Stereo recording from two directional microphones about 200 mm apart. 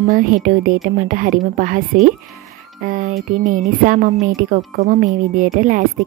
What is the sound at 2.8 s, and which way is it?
A woman's voice, 45° right (ahead or behind).